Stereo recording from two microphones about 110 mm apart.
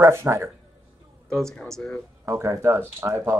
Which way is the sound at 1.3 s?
5° left (ahead or behind).